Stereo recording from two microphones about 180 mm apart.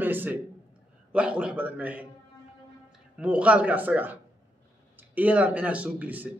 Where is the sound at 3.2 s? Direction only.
5° right (ahead or behind).